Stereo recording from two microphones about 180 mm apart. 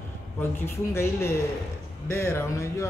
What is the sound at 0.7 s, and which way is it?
Speech, 15° left (ahead or behind).